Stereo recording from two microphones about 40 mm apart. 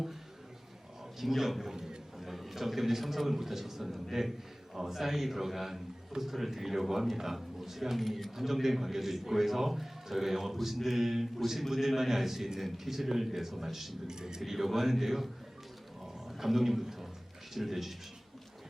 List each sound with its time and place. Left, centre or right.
1.2 s a man's voice: centre
1.7 s a man's voice: centre
2.1 s a man's voice: centre
14.1 s a man's voice: centre
16.4 s a man's voice: centre